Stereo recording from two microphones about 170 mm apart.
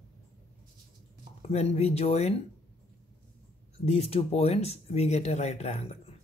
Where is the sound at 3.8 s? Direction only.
40° left (ahead or behind).